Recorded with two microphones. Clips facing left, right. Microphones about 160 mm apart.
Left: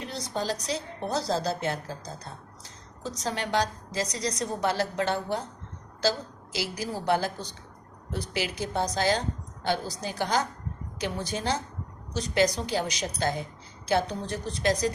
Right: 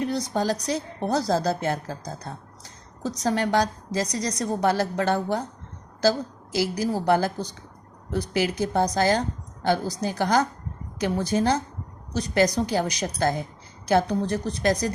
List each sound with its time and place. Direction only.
0.0 s a woman's voice: 50° right (ahead or behind)